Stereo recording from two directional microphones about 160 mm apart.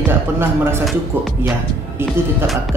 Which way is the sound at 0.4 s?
15° right (ahead or behind).